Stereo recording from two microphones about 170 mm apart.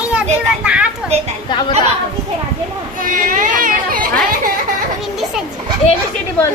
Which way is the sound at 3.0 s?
55° right (ahead or behind).